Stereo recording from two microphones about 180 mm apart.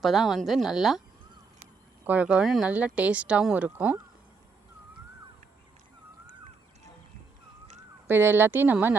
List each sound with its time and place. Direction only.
0.0 s speech: centre (ahead or behind)
2.0 s speech: 5° right (ahead or behind)
8.0 s speech: 10° right (ahead or behind)